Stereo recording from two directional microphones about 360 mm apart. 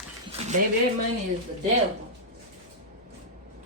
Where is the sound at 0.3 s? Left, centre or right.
Centre.